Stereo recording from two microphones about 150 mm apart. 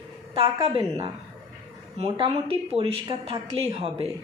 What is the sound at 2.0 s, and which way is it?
Speech, 35° right (ahead or behind).